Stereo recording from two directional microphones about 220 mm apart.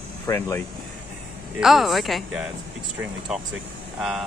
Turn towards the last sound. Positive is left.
turn(degrees=0)  # may be behind; listen again after turning